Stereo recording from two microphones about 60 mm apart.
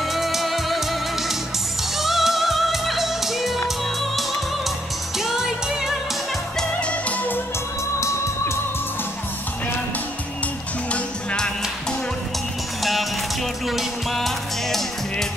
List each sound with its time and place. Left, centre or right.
0.0 s music: centre
6.6 s music: centre
10.9 s music: centre
12.8 s music: centre